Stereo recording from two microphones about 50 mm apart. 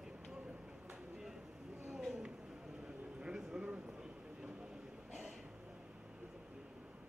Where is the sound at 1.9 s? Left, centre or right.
Centre.